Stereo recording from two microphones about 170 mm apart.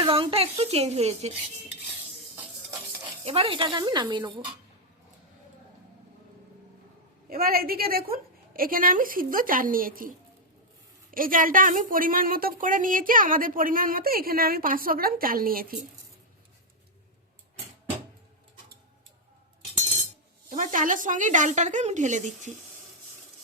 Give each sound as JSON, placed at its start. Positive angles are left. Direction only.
{"t": 0.0, "sound": "a woman's voice", "side_deg": -30}
{"t": 3.2, "sound": "speech", "side_deg": -35}
{"t": 7.3, "sound": "speech", "side_deg": -60}
{"t": 11.1, "sound": "speech", "side_deg": -55}
{"t": 20.5, "sound": "a woman's voice", "side_deg": -50}